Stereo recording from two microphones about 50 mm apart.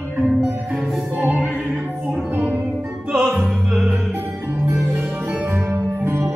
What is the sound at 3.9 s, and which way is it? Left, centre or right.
Music, right.